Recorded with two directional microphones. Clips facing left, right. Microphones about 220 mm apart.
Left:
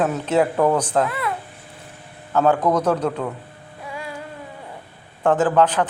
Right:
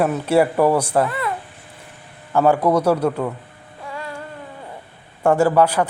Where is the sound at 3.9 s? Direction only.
10° left (ahead or behind).